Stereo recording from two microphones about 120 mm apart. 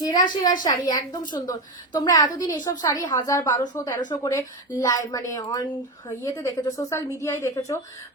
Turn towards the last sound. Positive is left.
turn(degrees=25)  # may be behind; listen again after turning